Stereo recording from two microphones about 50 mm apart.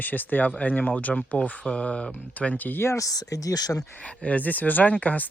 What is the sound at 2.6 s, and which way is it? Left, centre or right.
Speech, left.